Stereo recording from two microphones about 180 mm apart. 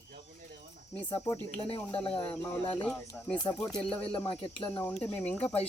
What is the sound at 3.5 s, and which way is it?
Speech, 5° left (ahead or behind).